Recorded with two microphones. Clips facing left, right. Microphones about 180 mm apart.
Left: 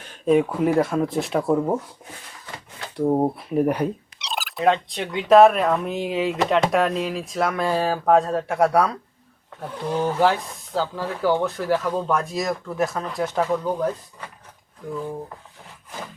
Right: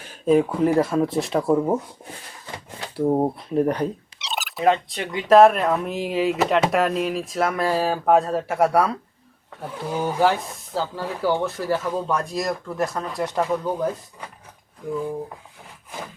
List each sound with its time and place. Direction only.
0.3 s speech: centre (ahead or behind)
2.9 s speech: 5° left (ahead or behind)